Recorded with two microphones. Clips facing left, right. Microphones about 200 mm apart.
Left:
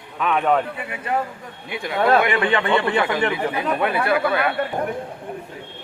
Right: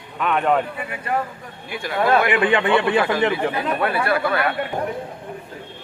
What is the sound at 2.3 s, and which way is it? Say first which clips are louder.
Speech: right 2 dB; 15° right (ahead or behind).